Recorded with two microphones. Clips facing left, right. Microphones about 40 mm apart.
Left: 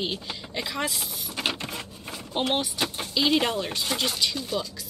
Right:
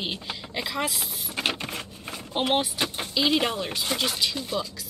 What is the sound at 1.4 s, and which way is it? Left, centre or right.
Printer, centre.